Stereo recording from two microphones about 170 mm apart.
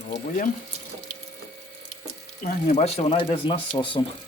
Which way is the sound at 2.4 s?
50° left (ahead or behind).